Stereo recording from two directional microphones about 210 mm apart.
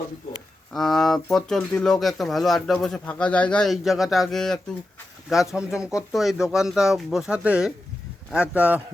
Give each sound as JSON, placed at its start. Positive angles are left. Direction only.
{"t": 0.7, "sound": "a man's voice", "side_deg": 0}